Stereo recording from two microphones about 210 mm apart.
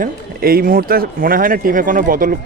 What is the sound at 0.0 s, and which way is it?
Speech, 45° right (ahead or behind).